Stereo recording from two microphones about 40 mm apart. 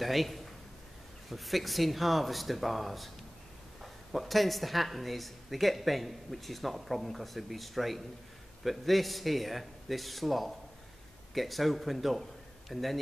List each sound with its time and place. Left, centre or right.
0.0 s a man's voice: centre